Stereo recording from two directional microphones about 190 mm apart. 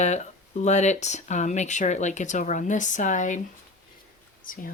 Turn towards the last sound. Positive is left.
turn(degrees=45)  # may be behind; listen again after turning